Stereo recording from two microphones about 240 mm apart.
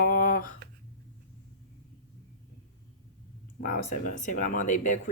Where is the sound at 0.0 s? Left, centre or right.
Left.